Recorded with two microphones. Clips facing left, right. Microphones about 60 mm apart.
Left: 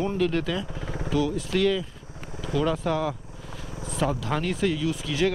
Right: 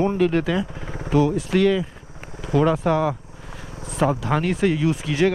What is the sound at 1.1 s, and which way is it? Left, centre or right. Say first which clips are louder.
Speech: right 7 dB; right.